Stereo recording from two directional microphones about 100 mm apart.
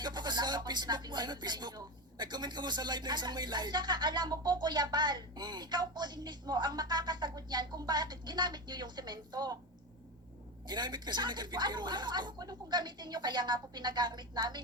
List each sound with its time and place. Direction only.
0.0 s speech: 45° right (ahead or behind)
10.7 s speech: 45° right (ahead or behind)